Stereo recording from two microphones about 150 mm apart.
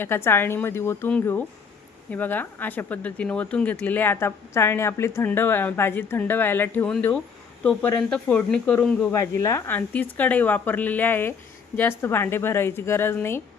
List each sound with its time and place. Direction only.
0.0 s speech: 15° left (ahead or behind)